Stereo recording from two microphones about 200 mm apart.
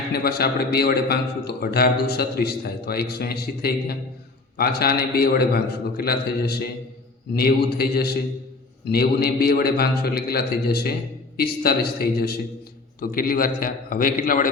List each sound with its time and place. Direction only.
0.1 s a man's voice: 50° left (ahead or behind)